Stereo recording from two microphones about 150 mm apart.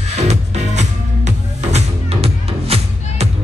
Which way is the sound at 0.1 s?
50° right (ahead or behind).